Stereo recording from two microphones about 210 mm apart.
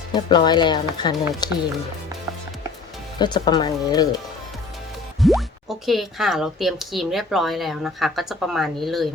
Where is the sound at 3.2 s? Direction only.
20° left (ahead or behind).